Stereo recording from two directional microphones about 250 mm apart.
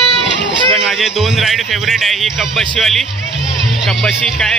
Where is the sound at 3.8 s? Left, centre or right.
Centre.